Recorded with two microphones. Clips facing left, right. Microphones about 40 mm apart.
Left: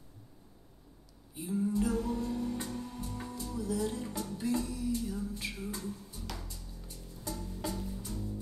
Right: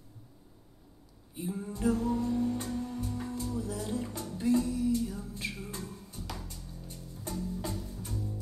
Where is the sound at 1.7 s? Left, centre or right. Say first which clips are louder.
Right 5 dB; right.